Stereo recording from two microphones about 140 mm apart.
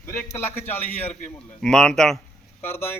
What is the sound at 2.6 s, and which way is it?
Speech, 15° left (ahead or behind).